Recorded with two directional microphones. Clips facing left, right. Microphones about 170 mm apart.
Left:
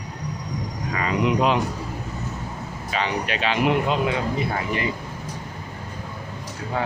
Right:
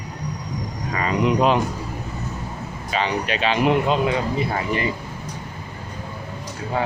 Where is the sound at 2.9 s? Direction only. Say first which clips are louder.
Right 2 dB; 25° right (ahead or behind).